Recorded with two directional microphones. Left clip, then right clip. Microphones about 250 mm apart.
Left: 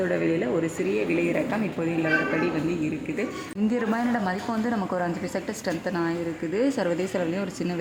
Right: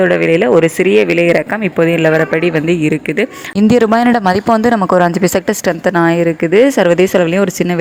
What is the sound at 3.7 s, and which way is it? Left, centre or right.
Speech, right.